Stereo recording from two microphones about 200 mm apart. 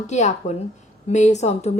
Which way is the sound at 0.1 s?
35° left (ahead or behind).